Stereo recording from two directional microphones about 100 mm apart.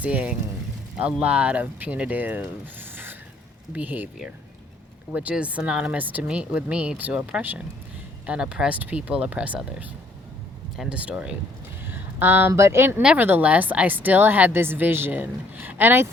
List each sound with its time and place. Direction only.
0.0 s speech: 10° right (ahead or behind)
2.9 s a sound: 20° right (ahead or behind)
3.7 s speech: 15° right (ahead or behind)
5.1 s speech: 15° right (ahead or behind)
10.8 s speech: 10° right (ahead or behind)
13.0 s a woman's voice: 10° right (ahead or behind)